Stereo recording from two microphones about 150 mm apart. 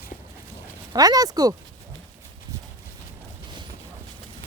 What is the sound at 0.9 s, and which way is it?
Speech, 25° right (ahead or behind).